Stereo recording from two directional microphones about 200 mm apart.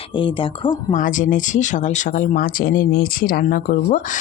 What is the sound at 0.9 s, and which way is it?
Speech, 40° left (ahead or behind).